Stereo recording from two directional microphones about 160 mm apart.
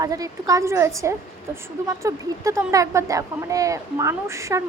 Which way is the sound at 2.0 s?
20° right (ahead or behind).